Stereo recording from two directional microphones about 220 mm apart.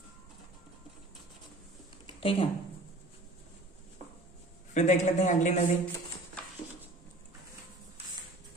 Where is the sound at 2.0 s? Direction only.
25° left (ahead or behind).